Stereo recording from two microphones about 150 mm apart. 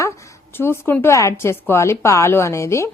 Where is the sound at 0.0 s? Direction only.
20° left (ahead or behind).